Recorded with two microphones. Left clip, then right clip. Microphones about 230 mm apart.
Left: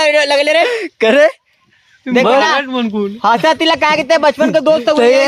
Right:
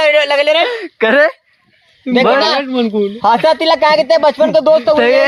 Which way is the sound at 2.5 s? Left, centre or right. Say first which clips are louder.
Right 1 dB; left.